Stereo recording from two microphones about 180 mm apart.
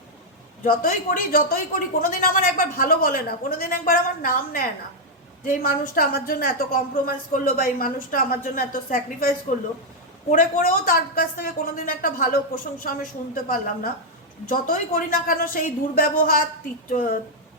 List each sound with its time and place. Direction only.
0.6 s a woman's voice: 50° left (ahead or behind)
10.3 s a woman's voice: 50° left (ahead or behind)